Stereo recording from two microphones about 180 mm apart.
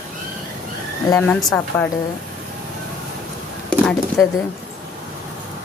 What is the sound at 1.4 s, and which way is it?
Speech, centre (ahead or behind).